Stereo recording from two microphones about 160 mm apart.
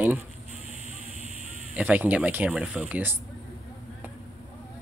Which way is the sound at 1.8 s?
10° right (ahead or behind).